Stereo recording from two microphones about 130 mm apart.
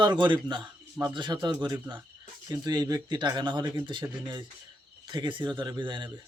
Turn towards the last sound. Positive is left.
turn(degrees=-35)  # may be behind; listen again after turning